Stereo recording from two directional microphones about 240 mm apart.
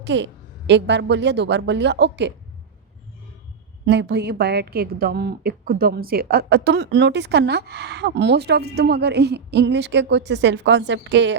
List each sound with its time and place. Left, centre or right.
0.0 s a woman's voice: right
3.8 s a woman's voice: right